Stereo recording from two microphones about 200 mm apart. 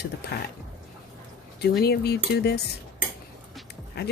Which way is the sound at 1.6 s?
55° left (ahead or behind).